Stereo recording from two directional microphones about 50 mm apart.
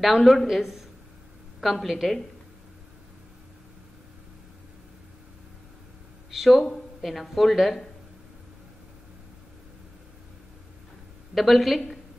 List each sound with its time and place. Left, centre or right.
0.0 s speech: centre
6.3 s speech: centre
11.3 s speech: centre